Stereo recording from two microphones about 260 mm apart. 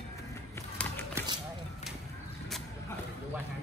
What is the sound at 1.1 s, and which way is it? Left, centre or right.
Vehicle, centre.